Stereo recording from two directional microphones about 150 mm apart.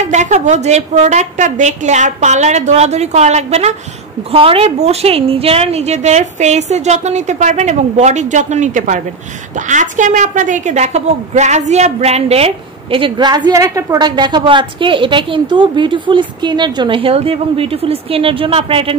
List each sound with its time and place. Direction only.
0.0 s a woman's voice: 50° right (ahead or behind)